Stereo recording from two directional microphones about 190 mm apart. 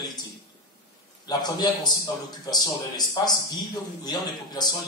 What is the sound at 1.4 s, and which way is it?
Speech, 20° left (ahead or behind).